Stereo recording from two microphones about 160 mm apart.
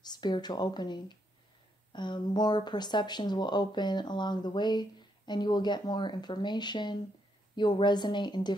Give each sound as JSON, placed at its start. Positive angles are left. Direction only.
{"t": 0.0, "sound": "speech", "side_deg": 25}